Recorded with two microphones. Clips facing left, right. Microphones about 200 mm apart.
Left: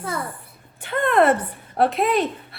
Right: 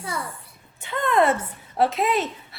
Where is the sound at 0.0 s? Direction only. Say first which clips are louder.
Left 3 dB; 50° left (ahead or behind).